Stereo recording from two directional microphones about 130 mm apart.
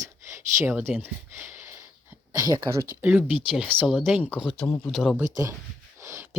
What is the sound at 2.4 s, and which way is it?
Speech, 25° right (ahead or behind).